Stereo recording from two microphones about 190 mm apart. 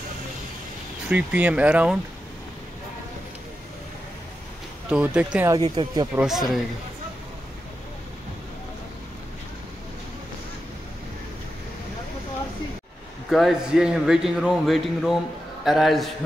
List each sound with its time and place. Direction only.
1.1 s speech: 5° right (ahead or behind)
4.8 s speech: 5° right (ahead or behind)
5.5 s speech: 20° right (ahead or behind)
6.1 s a man's voice: centre (ahead or behind)
13.3 s a man's voice: centre (ahead or behind)